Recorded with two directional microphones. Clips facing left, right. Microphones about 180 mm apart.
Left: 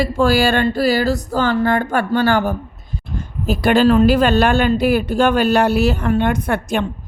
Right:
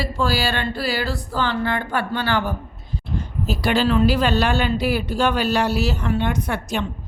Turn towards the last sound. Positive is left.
turn(degrees=55)  # may be behind; listen again after turning